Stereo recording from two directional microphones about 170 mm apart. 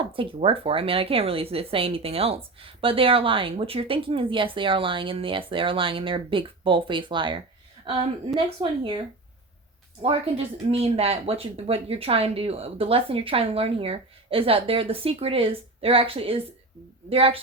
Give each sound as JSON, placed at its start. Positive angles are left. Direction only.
{"t": 0.0, "sound": "speech", "side_deg": -30}
{"t": 8.4, "sound": "speech", "side_deg": -30}
{"t": 10.0, "sound": "speech", "side_deg": -35}